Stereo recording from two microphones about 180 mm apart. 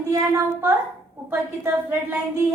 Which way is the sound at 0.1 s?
15° right (ahead or behind).